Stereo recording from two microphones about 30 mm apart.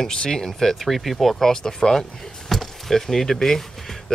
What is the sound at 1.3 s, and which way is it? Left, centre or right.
Speech, centre.